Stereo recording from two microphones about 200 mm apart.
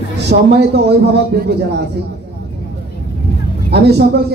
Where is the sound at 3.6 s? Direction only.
55° right (ahead or behind).